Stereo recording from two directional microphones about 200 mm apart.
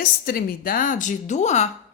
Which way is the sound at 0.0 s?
50° left (ahead or behind).